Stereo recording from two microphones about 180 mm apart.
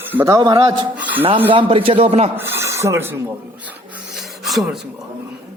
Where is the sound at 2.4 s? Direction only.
15° right (ahead or behind).